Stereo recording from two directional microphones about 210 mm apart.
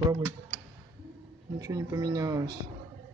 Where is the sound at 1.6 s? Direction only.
15° right (ahead or behind).